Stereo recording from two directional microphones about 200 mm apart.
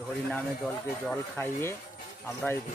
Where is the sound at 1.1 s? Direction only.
5° left (ahead or behind).